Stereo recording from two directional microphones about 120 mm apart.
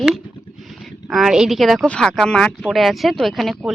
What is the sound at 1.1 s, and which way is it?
Speech, 5° right (ahead or behind).